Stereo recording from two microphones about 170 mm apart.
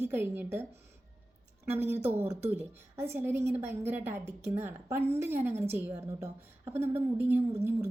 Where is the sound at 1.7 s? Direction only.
15° right (ahead or behind).